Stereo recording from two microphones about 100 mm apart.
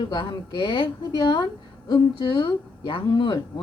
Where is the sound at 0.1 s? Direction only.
50° left (ahead or behind).